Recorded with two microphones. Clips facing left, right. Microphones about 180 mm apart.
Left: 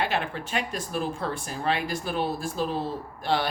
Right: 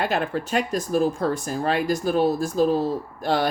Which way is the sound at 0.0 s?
45° right (ahead or behind).